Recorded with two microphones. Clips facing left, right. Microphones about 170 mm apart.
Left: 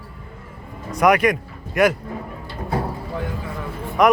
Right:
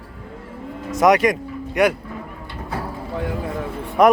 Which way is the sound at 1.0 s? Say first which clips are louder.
Right 1 dB; 25° right (ahead or behind).